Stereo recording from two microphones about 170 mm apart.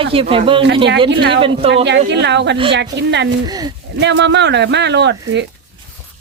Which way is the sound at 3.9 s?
90° right.